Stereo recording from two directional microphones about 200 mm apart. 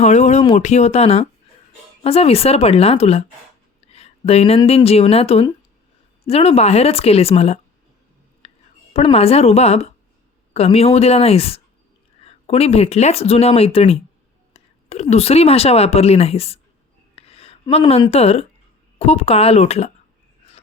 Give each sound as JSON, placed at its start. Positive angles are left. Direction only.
{"t": 0.0, "sound": "speech", "side_deg": 35}
{"t": 8.4, "sound": "whispering", "side_deg": 30}
{"t": 8.9, "sound": "a woman's voice", "side_deg": 30}